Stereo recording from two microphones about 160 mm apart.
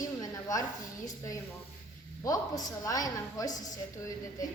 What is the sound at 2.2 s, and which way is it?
A woman's voice, 20° left (ahead or behind).